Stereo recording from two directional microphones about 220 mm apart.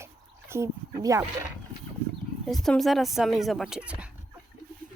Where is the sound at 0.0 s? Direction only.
10° right (ahead or behind).